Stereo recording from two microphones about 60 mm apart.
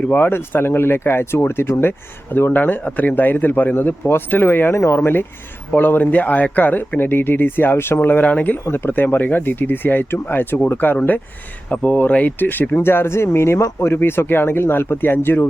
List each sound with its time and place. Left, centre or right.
0.1 s speech: left
4.7 s speech: left
8.5 s speech: left